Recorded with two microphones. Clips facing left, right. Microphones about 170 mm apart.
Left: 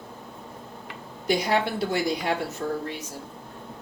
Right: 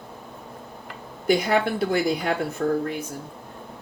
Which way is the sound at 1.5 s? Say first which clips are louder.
Right 3 dB; 55° right (ahead or behind).